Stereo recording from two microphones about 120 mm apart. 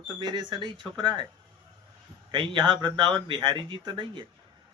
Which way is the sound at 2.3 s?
40° right (ahead or behind).